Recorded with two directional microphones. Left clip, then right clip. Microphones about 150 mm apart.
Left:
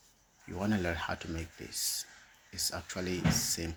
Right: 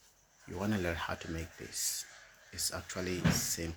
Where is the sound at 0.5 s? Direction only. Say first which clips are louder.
Left 2 dB; 15° left (ahead or behind).